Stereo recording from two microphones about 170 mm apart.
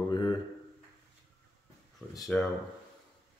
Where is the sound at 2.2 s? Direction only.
Centre (ahead or behind).